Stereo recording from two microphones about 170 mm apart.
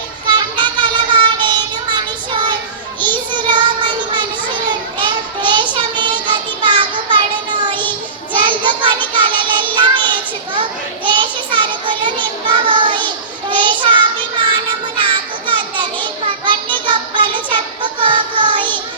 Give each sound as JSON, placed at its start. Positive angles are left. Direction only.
{"t": 0.3, "sound": "child singing", "side_deg": -25}
{"t": 4.7, "sound": "a sound", "side_deg": -25}
{"t": 5.7, "sound": "child singing", "side_deg": -25}